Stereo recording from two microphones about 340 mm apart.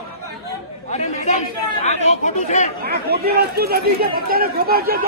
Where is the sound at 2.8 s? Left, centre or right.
Right.